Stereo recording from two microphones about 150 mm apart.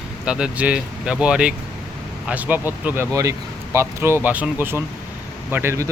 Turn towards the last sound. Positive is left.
turn(degrees=-20)  # may be behind; listen again after turning